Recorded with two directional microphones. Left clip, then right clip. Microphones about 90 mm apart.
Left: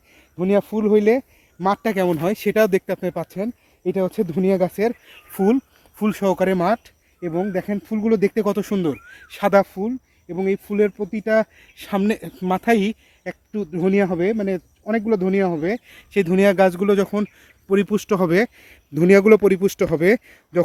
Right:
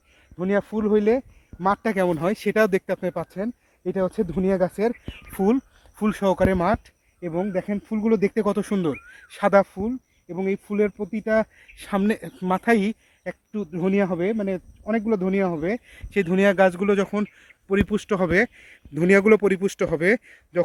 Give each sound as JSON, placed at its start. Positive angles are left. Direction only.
{"t": 0.3, "sound": "speech", "side_deg": 0}
{"t": 1.5, "sound": "speech", "side_deg": -35}
{"t": 5.4, "sound": "speech", "side_deg": -20}
{"t": 6.0, "sound": "speech", "side_deg": -40}
{"t": 12.0, "sound": "speech", "side_deg": -45}
{"t": 13.5, "sound": "speech", "side_deg": -35}
{"t": 16.1, "sound": "speech", "side_deg": -25}
{"t": 17.7, "sound": "speech", "side_deg": -5}